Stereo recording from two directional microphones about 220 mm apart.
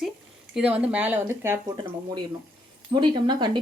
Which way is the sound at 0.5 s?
5° right (ahead or behind).